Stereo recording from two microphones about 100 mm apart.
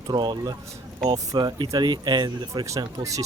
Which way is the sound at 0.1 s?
45° right (ahead or behind).